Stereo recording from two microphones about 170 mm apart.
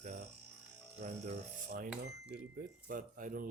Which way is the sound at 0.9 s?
40° right (ahead or behind).